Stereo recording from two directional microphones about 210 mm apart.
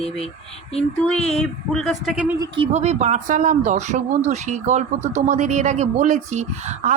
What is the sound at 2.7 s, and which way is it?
A woman's voice, 30° right (ahead or behind).